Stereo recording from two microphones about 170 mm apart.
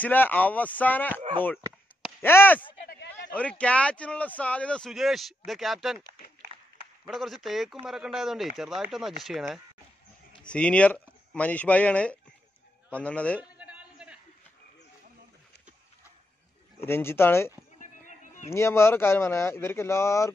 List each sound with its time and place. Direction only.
0.0 s speech: 10° left (ahead or behind)
2.2 s speech: 10° left (ahead or behind)
7.1 s speech: centre (ahead or behind)
13.4 s a sound: 5° right (ahead or behind)
16.8 s speech: 15° left (ahead or behind)
17.7 s a sound: 50° left (ahead or behind)
18.5 s speech: 15° left (ahead or behind)